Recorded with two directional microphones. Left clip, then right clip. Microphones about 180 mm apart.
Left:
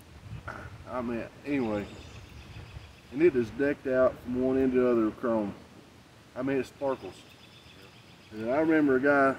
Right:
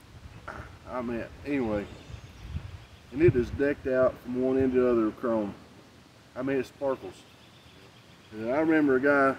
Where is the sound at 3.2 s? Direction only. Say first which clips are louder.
Right 1 dB; 10° right (ahead or behind).